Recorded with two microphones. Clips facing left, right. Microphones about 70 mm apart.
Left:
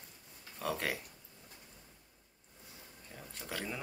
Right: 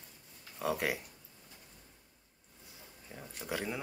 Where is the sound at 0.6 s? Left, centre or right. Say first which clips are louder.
Right 3 dB; centre.